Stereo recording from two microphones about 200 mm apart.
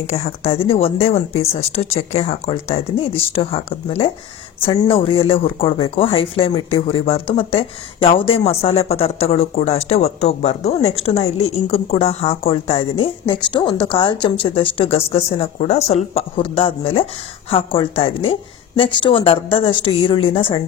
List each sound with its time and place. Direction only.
0.0 s speech: 30° left (ahead or behind)